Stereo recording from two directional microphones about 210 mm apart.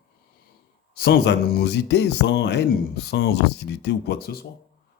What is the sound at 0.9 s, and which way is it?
Speech, 45° left (ahead or behind).